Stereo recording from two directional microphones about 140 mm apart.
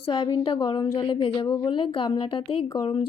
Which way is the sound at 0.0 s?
35° left (ahead or behind).